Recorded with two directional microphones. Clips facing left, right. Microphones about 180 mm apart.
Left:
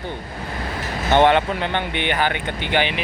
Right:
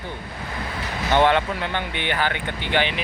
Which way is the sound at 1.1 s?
25° left (ahead or behind).